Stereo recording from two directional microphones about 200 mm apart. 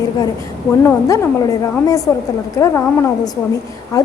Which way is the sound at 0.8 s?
15° left (ahead or behind).